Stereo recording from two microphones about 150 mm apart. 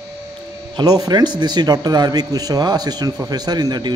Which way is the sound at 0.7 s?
25° right (ahead or behind).